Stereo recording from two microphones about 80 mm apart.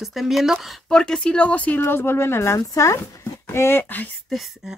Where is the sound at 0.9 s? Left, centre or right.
Centre; by 4.0 s left.